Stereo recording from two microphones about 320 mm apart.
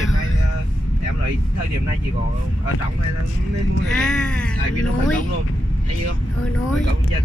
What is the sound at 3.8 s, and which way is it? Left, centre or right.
Speech, centre.